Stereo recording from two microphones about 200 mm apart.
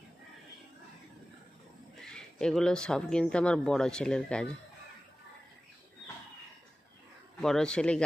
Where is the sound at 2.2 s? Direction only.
Centre (ahead or behind).